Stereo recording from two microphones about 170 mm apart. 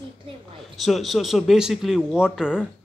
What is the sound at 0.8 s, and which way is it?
Speech, centre (ahead or behind).